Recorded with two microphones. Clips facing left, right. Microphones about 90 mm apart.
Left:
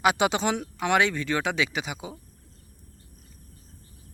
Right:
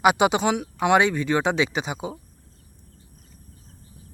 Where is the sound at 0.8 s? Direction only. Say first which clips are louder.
Right 5 dB; 20° right (ahead or behind).